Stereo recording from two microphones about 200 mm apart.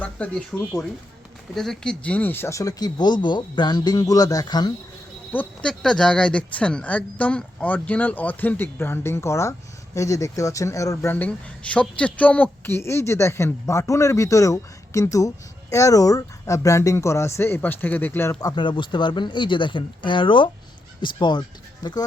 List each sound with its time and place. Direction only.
0.0 s speech: 5° left (ahead or behind)
1.5 s speech: centre (ahead or behind); by 4.7 s 20° left (ahead or behind)
5.3 s speech: 5° left (ahead or behind); by 21.4 s 20° left (ahead or behind)